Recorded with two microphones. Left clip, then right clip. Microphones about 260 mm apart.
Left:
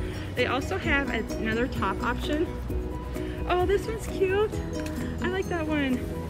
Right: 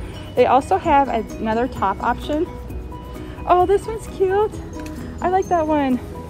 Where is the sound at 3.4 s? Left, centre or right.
Centre.